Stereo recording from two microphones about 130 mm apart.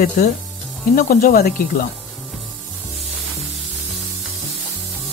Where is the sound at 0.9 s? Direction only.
90° left.